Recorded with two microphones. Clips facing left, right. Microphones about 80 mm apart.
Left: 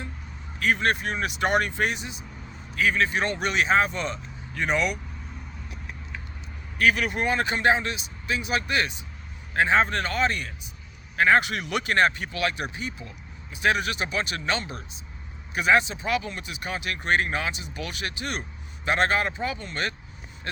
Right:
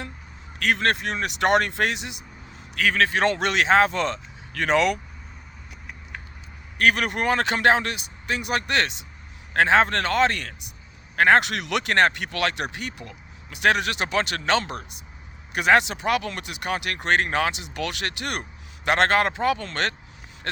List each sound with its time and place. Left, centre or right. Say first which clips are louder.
0.6 s speech: right 1 dB; right
6.7 s speech: right 1 dB; right
11.2 s speech: right 3 dB; right
18.9 s speech: right 4 dB; right